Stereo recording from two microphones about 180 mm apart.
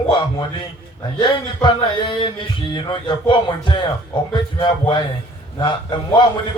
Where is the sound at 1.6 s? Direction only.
25° left (ahead or behind).